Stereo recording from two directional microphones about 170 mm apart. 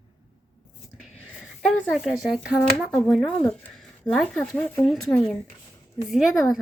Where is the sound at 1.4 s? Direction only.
5° right (ahead or behind).